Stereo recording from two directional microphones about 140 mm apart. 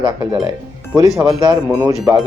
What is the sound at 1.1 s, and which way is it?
Speech, 25° right (ahead or behind).